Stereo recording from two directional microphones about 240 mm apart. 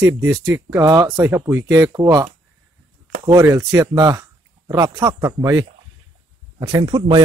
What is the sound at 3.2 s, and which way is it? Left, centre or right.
Speech, centre.